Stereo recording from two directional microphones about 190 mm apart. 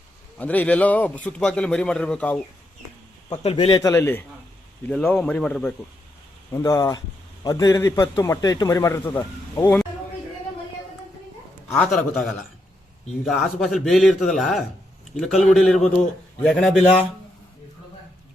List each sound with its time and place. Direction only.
0.3 s a man's voice: 10° left (ahead or behind)
3.3 s speech: 30° left (ahead or behind)
3.8 s a man's voice: 10° left (ahead or behind)
6.5 s a man's voice: 15° left (ahead or behind)
11.7 s a man's voice: centre (ahead or behind)